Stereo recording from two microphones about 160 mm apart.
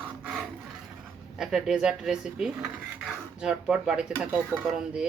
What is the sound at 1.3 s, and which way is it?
Speech, 5° right (ahead or behind).